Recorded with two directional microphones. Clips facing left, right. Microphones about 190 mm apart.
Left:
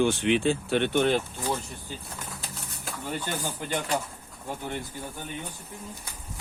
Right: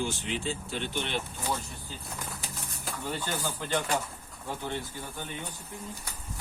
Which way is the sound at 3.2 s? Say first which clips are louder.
Left 1 dB; 15° left (ahead or behind).